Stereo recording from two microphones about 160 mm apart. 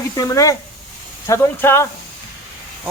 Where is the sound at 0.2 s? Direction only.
20° left (ahead or behind).